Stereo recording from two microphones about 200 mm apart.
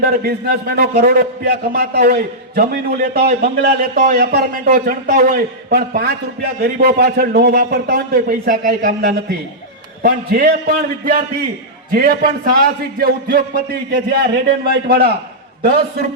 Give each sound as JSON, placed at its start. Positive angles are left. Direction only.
{"t": 0.0, "sound": "a man's voice", "side_deg": -50}